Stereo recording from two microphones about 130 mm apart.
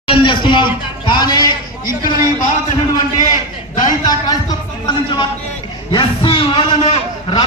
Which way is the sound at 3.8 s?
30° left (ahead or behind).